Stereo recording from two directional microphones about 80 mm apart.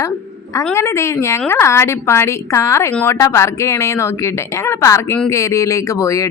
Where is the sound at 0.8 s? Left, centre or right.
Left.